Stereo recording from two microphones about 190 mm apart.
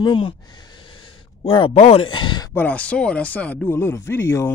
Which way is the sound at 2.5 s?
10° left (ahead or behind).